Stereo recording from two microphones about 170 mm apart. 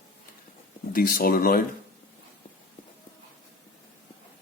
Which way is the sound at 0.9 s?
60° left (ahead or behind).